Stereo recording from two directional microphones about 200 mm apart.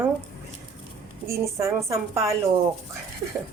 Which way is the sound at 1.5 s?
15° right (ahead or behind).